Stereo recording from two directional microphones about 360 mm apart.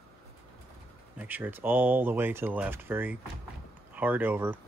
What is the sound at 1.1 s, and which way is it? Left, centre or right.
Speech, centre.